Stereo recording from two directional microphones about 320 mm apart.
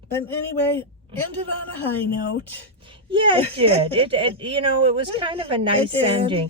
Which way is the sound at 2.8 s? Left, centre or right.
Centre.